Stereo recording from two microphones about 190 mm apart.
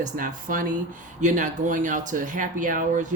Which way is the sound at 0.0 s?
45° right (ahead or behind).